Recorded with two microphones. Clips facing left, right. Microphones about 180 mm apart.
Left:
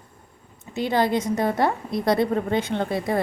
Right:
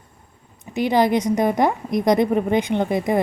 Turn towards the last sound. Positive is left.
turn(degrees=-15)  # may be behind; listen again after turning